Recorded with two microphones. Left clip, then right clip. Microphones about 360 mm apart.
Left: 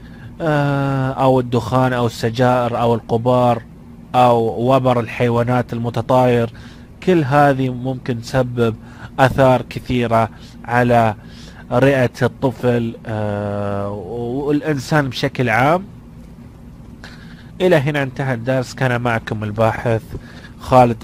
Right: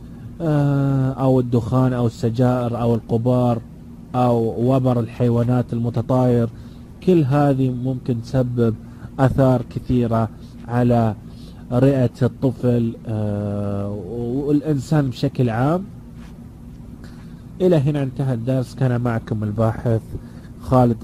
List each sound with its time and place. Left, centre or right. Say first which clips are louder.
0.4 s speech: left 4 dB; left
17.6 s speech: left 4 dB; left